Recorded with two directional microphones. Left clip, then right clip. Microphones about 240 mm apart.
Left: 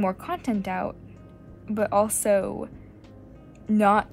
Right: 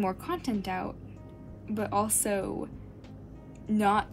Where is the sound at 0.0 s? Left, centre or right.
Left.